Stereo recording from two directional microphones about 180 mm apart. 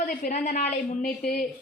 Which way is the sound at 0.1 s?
40° left (ahead or behind).